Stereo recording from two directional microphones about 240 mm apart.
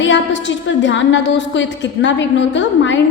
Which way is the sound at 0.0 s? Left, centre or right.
Left.